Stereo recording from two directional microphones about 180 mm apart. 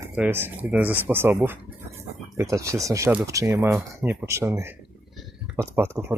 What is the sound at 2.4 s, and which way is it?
Speech, 15° right (ahead or behind).